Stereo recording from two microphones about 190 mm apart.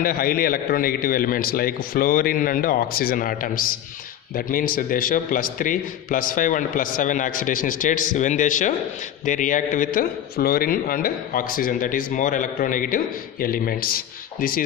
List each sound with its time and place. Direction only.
0.0 s a man's voice: 50° left (ahead or behind)